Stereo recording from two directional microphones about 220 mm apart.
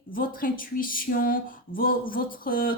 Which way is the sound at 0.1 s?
40° left (ahead or behind).